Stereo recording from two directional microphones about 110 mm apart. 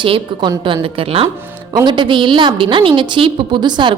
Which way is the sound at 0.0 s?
50° right (ahead or behind).